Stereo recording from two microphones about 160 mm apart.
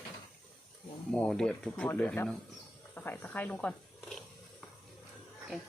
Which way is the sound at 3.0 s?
10° left (ahead or behind).